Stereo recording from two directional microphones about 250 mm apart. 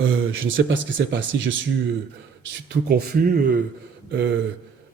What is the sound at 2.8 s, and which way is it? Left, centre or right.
Speech, right.